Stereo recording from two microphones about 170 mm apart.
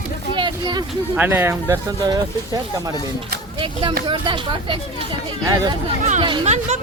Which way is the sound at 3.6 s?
30° right (ahead or behind).